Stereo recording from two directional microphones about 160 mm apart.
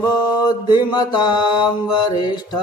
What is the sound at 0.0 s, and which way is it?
Mantra, 20° left (ahead or behind).